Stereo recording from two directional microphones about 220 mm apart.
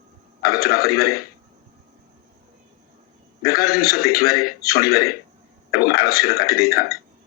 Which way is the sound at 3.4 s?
45° left (ahead or behind).